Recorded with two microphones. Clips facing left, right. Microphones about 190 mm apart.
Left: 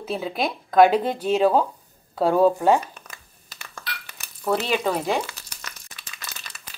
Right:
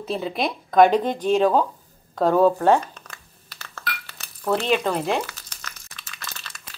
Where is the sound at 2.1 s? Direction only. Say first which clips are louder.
Right 1 dB; 10° left (ahead or behind).